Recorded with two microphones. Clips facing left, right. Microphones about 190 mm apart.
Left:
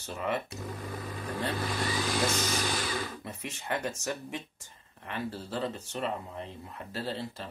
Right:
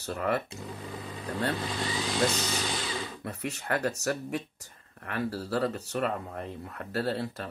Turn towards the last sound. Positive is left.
turn(degrees=-65)  # may be behind; listen again after turning